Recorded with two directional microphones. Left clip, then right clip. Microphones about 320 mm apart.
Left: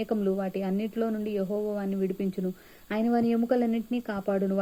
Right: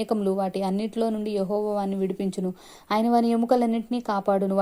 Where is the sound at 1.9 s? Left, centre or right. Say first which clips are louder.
Right 3 dB; centre.